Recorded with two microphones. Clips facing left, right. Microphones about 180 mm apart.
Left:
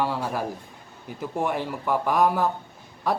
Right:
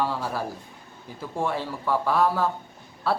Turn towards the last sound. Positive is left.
turn(degrees=15)  # may be behind; listen again after turning